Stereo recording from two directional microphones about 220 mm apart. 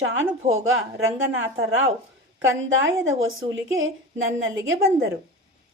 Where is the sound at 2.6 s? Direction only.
60° right (ahead or behind).